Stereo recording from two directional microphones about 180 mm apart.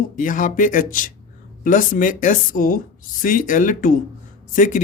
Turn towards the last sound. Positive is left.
turn(degrees=45)  # may be behind; listen again after turning